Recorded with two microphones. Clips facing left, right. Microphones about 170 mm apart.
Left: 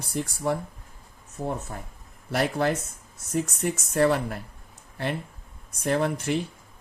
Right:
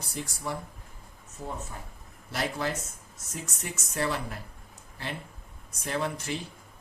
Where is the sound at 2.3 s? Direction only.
55° left (ahead or behind).